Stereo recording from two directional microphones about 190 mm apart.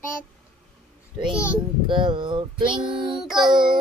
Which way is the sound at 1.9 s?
25° right (ahead or behind).